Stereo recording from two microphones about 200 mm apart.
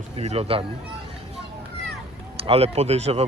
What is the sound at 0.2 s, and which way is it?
Speech, 30° right (ahead or behind).